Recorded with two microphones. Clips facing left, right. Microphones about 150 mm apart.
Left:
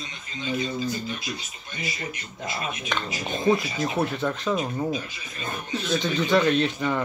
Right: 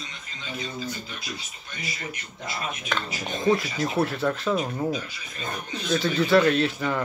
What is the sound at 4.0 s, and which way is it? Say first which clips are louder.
Speech: right 3 dB; centre (ahead or behind).